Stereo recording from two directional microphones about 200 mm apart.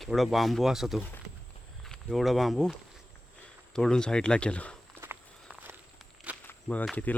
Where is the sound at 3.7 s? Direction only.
5° left (ahead or behind).